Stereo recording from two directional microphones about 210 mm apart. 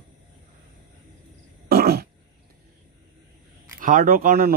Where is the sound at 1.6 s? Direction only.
50° right (ahead or behind).